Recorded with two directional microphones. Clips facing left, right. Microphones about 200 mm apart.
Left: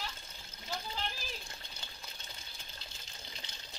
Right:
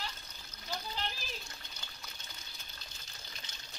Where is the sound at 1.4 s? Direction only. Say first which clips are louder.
Left 1 dB; 30° left (ahead or behind).